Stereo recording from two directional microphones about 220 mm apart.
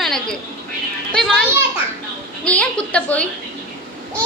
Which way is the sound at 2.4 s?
5° left (ahead or behind).